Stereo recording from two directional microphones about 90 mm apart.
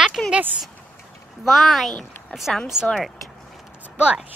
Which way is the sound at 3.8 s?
10° right (ahead or behind).